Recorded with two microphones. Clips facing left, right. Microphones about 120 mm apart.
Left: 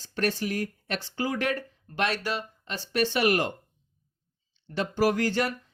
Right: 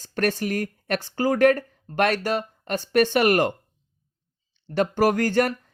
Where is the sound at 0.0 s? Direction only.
50° right (ahead or behind).